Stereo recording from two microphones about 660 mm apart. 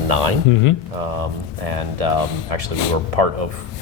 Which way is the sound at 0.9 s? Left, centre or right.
Right.